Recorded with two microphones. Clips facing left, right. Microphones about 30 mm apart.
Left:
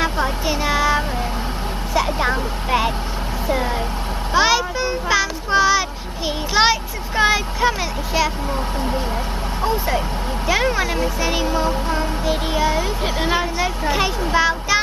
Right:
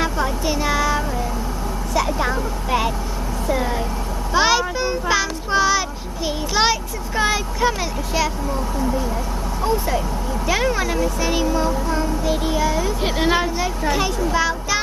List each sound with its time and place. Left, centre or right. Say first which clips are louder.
0.0 s a sound: left 1 dB; centre
2.0 s speech: left 1 dB; left
4.4 s a child's voice: left 1 dB; centre
8.7 s speech: right 3 dB; left
9.6 s a child's voice: even; left
13.0 s a woman's voice: right 4 dB; centre
13.6 s speech: left 1 dB; left